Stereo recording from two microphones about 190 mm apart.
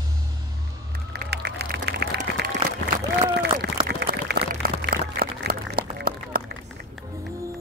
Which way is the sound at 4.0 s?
60° right (ahead or behind).